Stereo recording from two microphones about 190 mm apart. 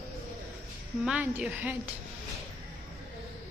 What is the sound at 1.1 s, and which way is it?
Speech, 5° right (ahead or behind).